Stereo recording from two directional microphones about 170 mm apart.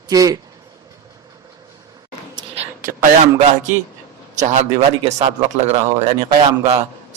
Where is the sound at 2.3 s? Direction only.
35° right (ahead or behind).